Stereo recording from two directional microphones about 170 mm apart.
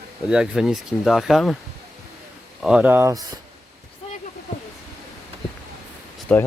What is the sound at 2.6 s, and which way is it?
Speech, 5° right (ahead or behind).